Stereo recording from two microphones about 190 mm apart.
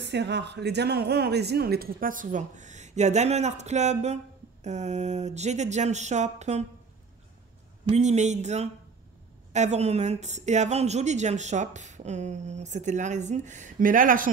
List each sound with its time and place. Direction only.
0.0 s a woman's voice: 65° right (ahead or behind); by 6.6 s 35° right (ahead or behind)
7.9 s a woman's voice: 35° right (ahead or behind)